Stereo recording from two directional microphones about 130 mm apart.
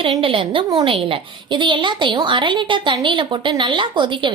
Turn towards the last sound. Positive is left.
turn(degrees=-40)  # may be behind; listen again after turning